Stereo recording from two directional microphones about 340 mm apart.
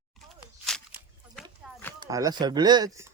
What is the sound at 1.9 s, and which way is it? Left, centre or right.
Speech, centre.